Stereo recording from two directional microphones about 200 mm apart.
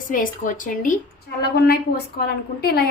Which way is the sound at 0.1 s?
40° left (ahead or behind).